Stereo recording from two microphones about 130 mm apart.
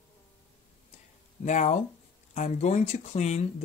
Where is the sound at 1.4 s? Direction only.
65° left (ahead or behind).